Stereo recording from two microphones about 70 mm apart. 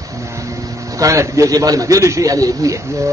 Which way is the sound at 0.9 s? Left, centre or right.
Right.